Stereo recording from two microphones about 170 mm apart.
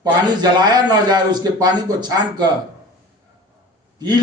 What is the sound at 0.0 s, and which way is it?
A man's voice, 25° right (ahead or behind).